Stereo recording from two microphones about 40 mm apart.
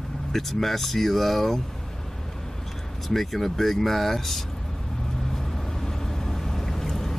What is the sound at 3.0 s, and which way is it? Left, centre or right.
Speech, centre.